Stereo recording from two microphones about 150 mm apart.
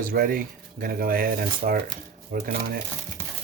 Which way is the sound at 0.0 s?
70° right (ahead or behind).